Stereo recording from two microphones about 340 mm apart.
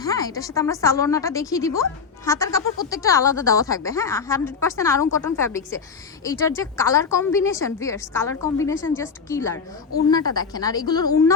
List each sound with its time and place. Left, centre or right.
0.0 s a woman's voice: centre